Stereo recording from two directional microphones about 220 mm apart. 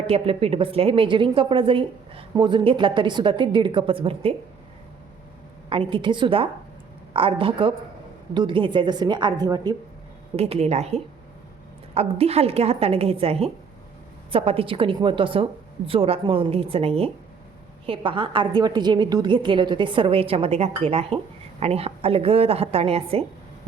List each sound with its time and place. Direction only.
0.1 s a woman's voice: 25° right (ahead or behind)
5.6 s a woman's voice: 25° right (ahead or behind)